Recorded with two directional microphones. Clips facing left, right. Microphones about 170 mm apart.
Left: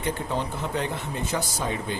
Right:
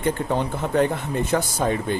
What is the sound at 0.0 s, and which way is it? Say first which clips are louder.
Speech: right 5 dB; 55° right (ahead or behind).